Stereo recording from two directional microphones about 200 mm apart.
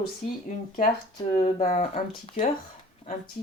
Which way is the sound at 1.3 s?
40° left (ahead or behind).